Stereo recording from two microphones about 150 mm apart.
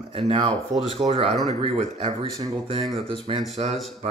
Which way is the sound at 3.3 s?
35° right (ahead or behind).